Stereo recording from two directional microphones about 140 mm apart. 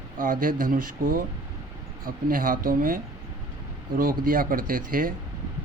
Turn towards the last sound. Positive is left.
turn(degrees=-80)